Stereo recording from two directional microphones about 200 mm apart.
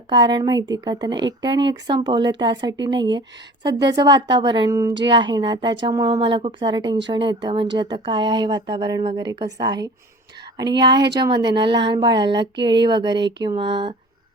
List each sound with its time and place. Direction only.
0.1 s speech: 20° right (ahead or behind)